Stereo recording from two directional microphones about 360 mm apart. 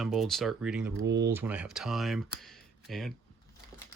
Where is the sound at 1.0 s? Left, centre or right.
Right.